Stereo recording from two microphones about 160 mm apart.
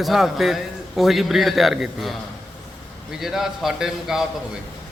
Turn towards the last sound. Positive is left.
turn(degrees=-5)  # may be behind; listen again after turning